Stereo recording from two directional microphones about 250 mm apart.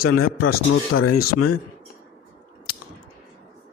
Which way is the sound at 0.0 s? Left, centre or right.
Left.